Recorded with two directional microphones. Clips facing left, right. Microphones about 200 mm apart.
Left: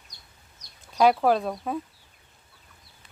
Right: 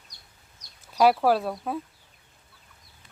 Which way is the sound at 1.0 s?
5° right (ahead or behind).